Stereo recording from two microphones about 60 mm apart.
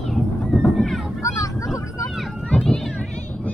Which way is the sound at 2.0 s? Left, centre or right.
Centre.